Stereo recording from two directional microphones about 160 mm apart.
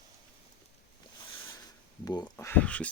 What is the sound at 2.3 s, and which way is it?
Speech, 15° left (ahead or behind).